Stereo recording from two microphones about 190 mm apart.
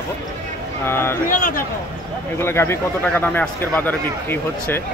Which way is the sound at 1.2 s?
45° left (ahead or behind).